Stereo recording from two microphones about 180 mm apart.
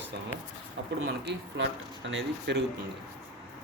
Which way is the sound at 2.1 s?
90° right.